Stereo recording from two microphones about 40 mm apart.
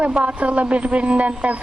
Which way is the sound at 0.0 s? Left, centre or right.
Right.